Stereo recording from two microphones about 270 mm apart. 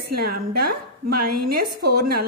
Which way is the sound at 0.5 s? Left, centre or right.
Right.